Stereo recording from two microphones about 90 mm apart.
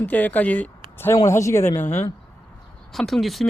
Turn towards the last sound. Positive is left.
turn(degrees=0)  # may be behind; listen again after turning